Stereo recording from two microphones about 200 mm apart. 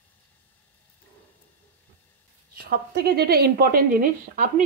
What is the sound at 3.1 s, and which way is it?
Speech, 50° right (ahead or behind).